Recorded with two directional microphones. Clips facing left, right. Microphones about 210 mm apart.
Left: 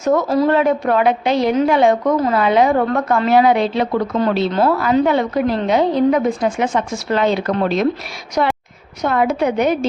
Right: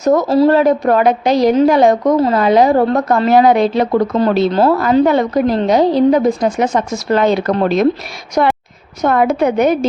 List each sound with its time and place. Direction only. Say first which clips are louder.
0.0 s a woman's voice: right 4 dB; 40° right (ahead or behind)